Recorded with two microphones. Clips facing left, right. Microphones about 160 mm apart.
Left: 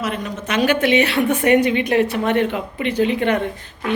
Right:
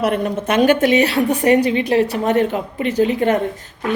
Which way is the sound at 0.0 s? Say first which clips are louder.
Right 7 dB; 55° right (ahead or behind).